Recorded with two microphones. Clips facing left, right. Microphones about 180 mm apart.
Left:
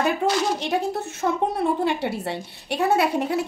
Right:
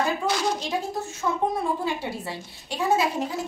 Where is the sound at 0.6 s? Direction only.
70° left (ahead or behind).